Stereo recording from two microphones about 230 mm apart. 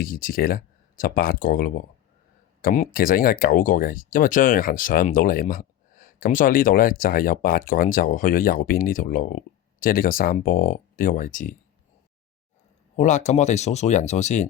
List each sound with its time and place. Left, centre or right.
0.0 s speech: left
13.0 s speech: left